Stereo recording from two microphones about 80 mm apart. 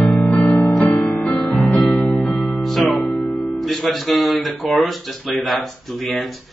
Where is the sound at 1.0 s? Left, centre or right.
Centre.